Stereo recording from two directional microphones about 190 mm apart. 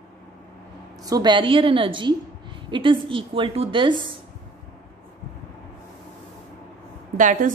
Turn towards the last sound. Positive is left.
turn(degrees=-45)  # may be behind; listen again after turning